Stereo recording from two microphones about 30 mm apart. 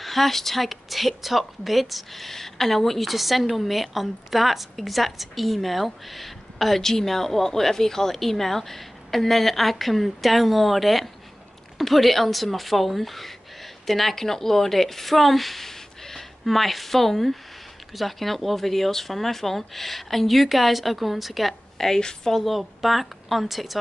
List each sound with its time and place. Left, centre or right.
0.0 s a woman's voice: centre
6.8 s a woman's voice: centre
16.4 s a woman's voice: centre
22.0 s speech: centre
22.4 s a woman's voice: centre